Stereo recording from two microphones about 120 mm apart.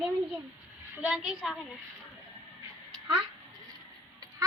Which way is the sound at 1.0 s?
5° right (ahead or behind).